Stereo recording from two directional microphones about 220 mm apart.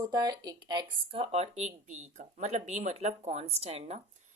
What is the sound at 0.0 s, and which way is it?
Speech, 20° right (ahead or behind).